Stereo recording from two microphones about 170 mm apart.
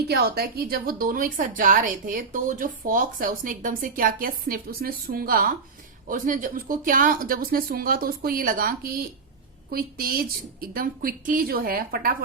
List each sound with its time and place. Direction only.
0.1 s a woman's voice: 70° right (ahead or behind)